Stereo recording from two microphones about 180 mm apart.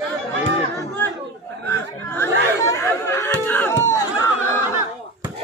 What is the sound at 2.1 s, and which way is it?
Chatter, 15° left (ahead or behind).